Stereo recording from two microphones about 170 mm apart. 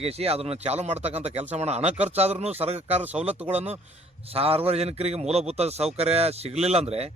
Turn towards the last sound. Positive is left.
turn(degrees=-40)  # may be behind; listen again after turning